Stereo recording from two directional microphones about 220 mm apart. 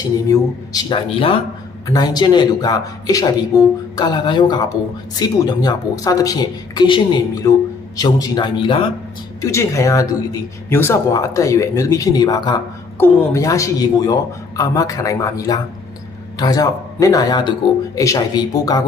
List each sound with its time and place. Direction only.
0.3 s a man's voice: 15° left (ahead or behind)